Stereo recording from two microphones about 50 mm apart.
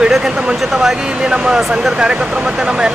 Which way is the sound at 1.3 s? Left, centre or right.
Centre.